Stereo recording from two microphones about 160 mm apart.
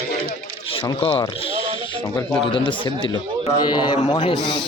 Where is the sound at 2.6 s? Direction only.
30° left (ahead or behind).